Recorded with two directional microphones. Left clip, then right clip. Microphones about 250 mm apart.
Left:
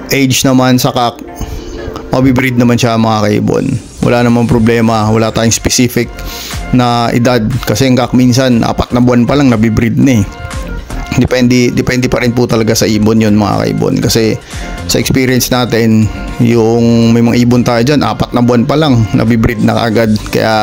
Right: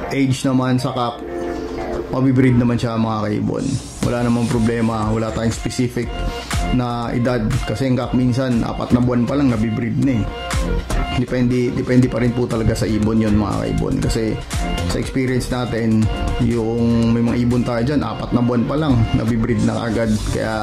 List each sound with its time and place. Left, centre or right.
0.1 s speech: left
2.1 s speech: left
11.3 s speech: left